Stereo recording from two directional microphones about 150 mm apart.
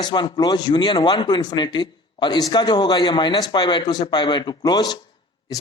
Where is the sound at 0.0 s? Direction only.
30° left (ahead or behind).